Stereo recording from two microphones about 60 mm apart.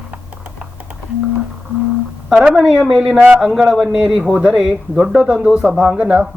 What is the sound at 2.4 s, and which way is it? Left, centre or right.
Speech, centre.